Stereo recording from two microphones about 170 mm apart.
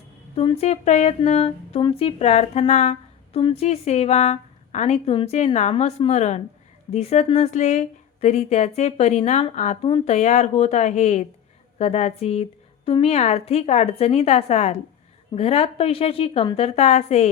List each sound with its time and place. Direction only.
0.3 s a woman's voice: 35° left (ahead or behind)